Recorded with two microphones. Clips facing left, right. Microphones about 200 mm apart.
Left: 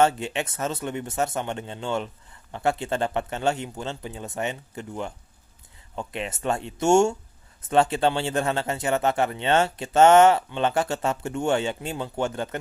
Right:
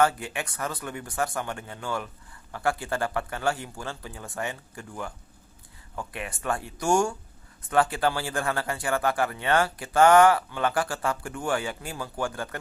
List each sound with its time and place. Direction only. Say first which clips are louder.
0.0 s speech: left 3 dB; 25° left (ahead or behind)